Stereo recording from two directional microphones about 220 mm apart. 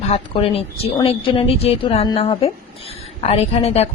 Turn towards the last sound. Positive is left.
turn(degrees=25)  # may be behind; listen again after turning